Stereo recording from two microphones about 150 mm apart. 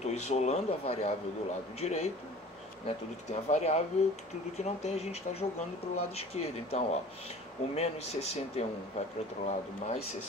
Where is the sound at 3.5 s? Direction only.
45° left (ahead or behind).